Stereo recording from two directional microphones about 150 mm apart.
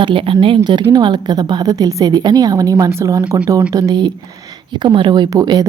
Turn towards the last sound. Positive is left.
turn(degrees=-25)  # may be behind; listen again after turning